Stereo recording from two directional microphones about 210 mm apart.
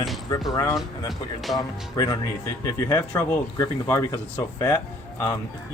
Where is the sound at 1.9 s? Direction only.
20° left (ahead or behind).